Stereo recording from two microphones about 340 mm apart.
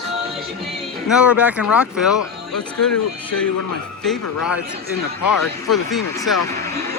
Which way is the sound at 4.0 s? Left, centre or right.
Centre.